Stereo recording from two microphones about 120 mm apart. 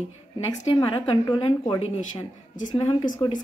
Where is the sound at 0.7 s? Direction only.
35° left (ahead or behind).